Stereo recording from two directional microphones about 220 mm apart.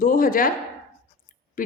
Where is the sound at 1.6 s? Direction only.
40° left (ahead or behind).